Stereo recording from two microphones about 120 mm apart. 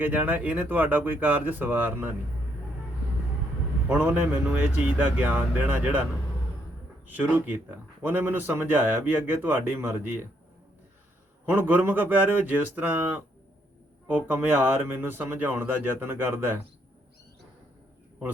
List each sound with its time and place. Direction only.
0.0 s speech: 15° right (ahead or behind)
3.8 s speech: 15° right (ahead or behind)
7.1 s speech: 15° right (ahead or behind)
11.5 s speech: 15° right (ahead or behind)